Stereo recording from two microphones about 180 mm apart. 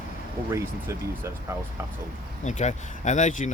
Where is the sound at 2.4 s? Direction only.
40° left (ahead or behind).